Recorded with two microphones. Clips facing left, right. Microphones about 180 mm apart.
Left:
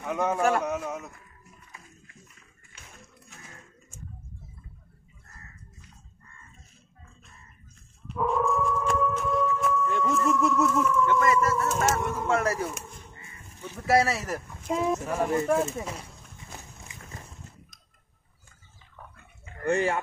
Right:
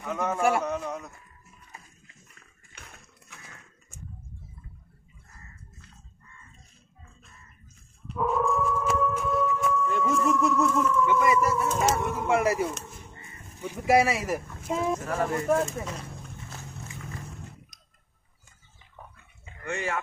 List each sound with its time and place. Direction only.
0.0 s a man's voice: 15° left (ahead or behind)
0.4 s speech: 10° right (ahead or behind)
0.7 s a sound: 5° left (ahead or behind)
8.1 s dog: centre (ahead or behind)
9.6 s music: centre (ahead or behind)
11.1 s speech: 10° right (ahead or behind)
15.0 s a man's voice: 10° left (ahead or behind)
19.6 s speech: 35° left (ahead or behind)